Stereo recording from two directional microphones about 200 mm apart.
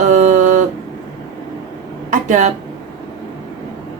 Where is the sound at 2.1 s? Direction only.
35° right (ahead or behind).